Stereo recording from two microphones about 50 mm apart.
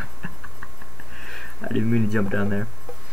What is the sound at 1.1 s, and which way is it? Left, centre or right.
Speech, centre.